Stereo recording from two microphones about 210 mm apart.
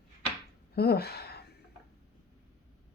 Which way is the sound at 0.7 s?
50° left (ahead or behind).